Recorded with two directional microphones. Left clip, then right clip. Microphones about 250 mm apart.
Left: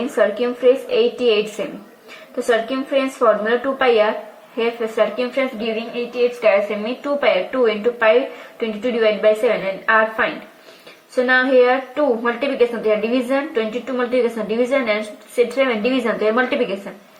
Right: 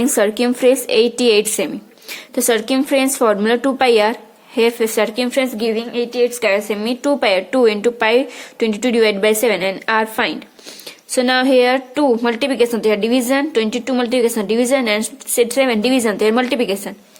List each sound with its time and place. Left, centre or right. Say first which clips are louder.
0.2 s a woman's voice: even; right